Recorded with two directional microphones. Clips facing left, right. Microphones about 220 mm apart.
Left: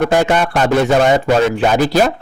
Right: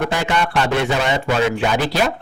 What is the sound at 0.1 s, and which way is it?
A man's voice, 45° left (ahead or behind).